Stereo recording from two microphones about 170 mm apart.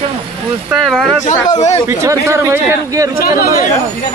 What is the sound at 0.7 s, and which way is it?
Speech, centre (ahead or behind).